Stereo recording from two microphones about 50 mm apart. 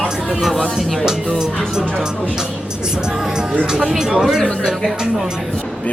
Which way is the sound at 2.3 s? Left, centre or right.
Centre.